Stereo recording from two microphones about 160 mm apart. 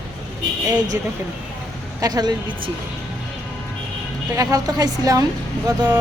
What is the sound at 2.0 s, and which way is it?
Speech, 25° right (ahead or behind).